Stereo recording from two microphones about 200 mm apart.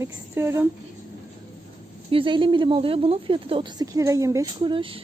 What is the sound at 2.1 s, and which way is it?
Speech, 25° right (ahead or behind).